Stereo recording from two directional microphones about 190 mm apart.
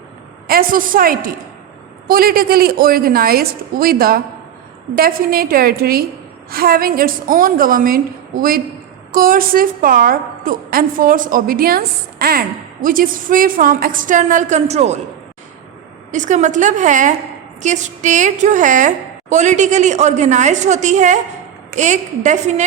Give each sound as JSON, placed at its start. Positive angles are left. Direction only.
{"t": 0.4, "sound": "a woman's voice", "side_deg": -50}
{"t": 16.1, "sound": "a woman's voice", "side_deg": -40}